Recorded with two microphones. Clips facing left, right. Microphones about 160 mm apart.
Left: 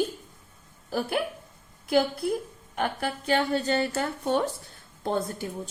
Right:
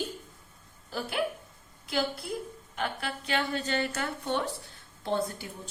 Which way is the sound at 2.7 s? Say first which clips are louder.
Left 5 dB; 50° left (ahead or behind).